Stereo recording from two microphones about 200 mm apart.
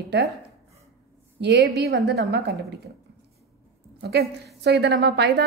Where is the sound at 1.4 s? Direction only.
55° right (ahead or behind).